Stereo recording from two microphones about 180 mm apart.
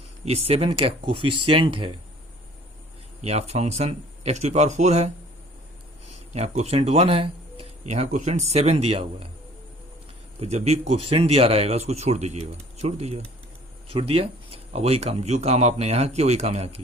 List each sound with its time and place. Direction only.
0.3 s speech: 35° right (ahead or behind)
3.2 s speech: 35° right (ahead or behind)
6.3 s speech: 40° right (ahead or behind)
10.4 s speech: 35° right (ahead or behind)